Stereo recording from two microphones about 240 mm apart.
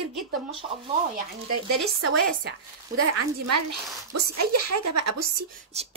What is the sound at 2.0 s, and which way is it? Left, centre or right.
Speech, right.